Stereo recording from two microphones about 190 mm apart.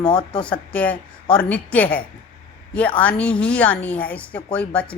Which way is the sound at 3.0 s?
5° left (ahead or behind).